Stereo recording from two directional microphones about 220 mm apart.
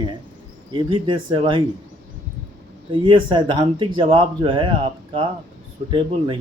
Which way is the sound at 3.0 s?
20° right (ahead or behind).